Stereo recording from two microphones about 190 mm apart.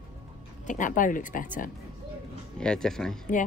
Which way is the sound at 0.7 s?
45° left (ahead or behind).